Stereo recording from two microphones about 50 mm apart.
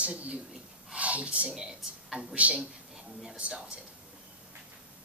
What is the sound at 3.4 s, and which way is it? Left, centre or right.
Speech, right.